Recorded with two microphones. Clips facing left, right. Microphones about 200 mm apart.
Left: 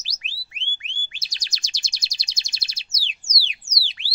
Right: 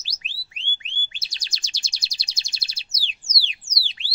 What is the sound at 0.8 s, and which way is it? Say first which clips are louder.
Chirp: right 1 dB; 30° right (ahead or behind).